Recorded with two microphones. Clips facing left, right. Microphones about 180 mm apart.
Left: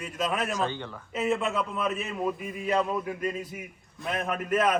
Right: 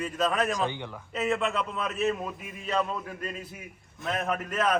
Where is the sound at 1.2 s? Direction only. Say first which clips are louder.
Left 1 dB; 5° left (ahead or behind).